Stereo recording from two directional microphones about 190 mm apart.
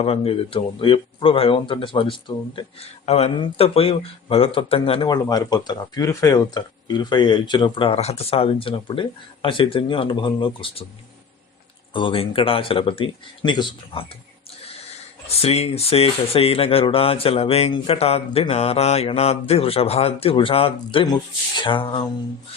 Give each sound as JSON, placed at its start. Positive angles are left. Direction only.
{"t": 0.0, "sound": "speech", "side_deg": 30}
{"t": 11.9, "sound": "speech", "side_deg": 30}
{"t": 15.4, "sound": "speech", "side_deg": 30}